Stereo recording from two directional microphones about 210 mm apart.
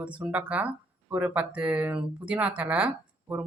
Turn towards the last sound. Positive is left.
turn(degrees=-10)  # may be behind; listen again after turning